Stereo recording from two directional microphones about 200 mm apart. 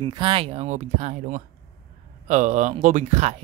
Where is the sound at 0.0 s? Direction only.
25° right (ahead or behind).